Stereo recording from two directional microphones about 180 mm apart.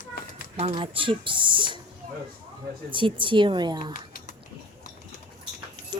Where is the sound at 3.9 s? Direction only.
50° left (ahead or behind).